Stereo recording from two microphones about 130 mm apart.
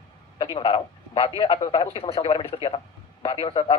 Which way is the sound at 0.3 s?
35° left (ahead or behind).